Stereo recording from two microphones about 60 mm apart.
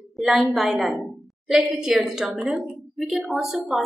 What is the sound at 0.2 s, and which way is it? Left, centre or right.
A woman's voice, centre.